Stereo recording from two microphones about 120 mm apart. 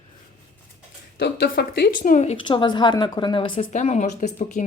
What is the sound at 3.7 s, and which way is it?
Speech, 80° left.